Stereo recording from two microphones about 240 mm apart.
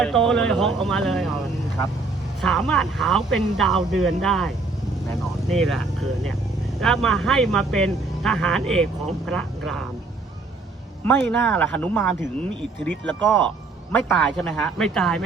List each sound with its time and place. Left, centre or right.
0.0 s speech: centre
2.4 s speech: centre
11.0 s speech: centre